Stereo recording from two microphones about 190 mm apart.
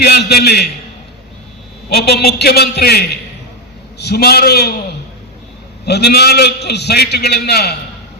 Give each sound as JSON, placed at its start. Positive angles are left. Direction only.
{"t": 0.0, "sound": "a man's voice", "side_deg": 55}
{"t": 1.9, "sound": "a man's voice", "side_deg": 55}
{"t": 5.8, "sound": "a man's voice", "side_deg": 60}